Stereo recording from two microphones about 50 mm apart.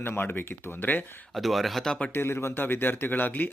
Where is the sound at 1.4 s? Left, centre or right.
Centre.